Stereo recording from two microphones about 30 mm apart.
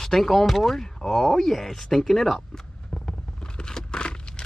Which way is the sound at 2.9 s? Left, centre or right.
Left.